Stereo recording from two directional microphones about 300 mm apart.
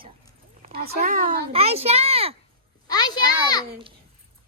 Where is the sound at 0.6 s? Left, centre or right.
Right.